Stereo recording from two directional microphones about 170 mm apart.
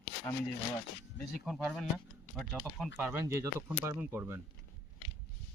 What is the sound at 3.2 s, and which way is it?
Speech, 15° right (ahead or behind).